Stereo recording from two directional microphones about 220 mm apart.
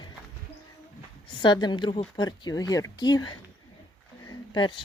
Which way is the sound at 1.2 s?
20° left (ahead or behind).